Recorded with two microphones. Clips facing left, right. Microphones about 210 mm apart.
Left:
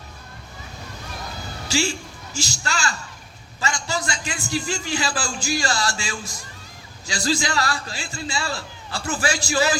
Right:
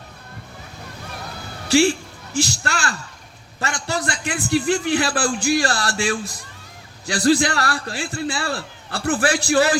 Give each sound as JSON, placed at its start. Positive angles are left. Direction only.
{"t": 1.6, "sound": "a man's voice", "side_deg": -60}